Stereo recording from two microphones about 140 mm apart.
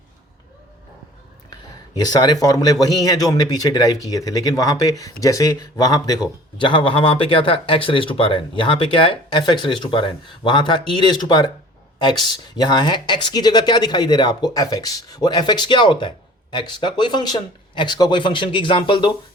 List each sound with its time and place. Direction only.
2.0 s speech: 30° left (ahead or behind)